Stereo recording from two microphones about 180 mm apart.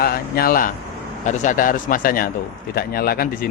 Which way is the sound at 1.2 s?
40° left (ahead or behind).